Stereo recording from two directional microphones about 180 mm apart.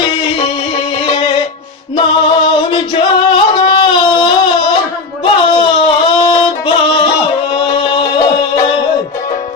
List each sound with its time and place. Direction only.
2.0 s singing: 25° left (ahead or behind)
5.2 s a sound: 25° left (ahead or behind)
7.6 s music: 30° left (ahead or behind)